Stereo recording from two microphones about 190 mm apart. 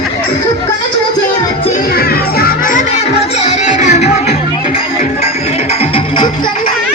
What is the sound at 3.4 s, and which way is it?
Music, 40° left (ahead or behind).